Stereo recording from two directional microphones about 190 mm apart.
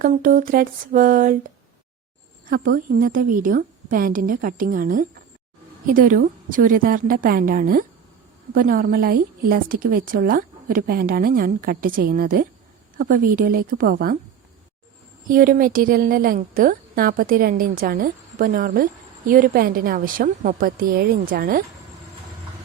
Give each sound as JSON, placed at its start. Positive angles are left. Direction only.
{"t": 0.0, "sound": "a woman's voice", "side_deg": -45}
{"t": 15.3, "sound": "a woman's voice", "side_deg": -45}